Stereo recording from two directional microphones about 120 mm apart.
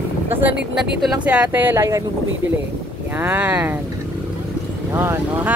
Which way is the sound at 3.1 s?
15° right (ahead or behind).